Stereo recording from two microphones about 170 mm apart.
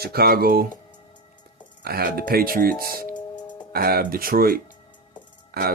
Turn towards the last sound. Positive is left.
turn(degrees=-65)  # may be behind; listen again after turning